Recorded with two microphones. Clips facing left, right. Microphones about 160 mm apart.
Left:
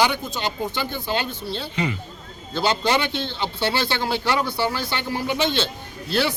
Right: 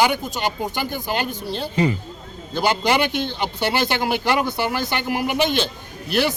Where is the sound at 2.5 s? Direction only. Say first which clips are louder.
Right 1 dB; 15° right (ahead or behind).